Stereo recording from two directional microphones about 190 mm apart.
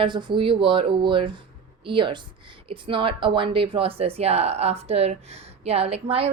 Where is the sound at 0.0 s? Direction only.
25° right (ahead or behind).